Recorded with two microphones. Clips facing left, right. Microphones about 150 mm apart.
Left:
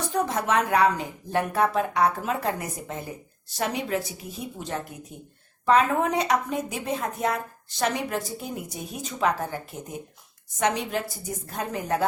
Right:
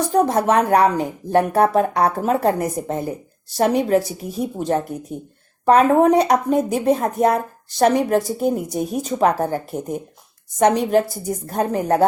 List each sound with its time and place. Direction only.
0.1 s speech: 40° right (ahead or behind)